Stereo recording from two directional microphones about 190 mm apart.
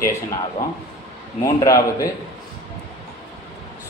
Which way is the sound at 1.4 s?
15° left (ahead or behind).